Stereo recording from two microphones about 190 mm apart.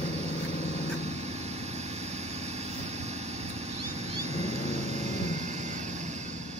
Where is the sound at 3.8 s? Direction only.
35° right (ahead or behind).